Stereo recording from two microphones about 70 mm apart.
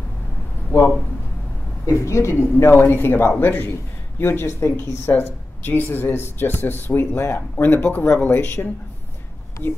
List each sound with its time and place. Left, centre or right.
0.7 s speech: left
1.9 s speech: left
2.4 s speech: left